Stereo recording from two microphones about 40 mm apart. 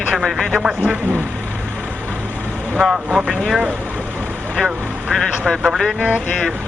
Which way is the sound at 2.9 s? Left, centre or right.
Right.